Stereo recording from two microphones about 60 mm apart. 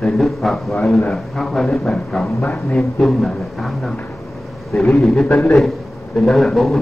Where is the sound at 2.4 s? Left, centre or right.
Left.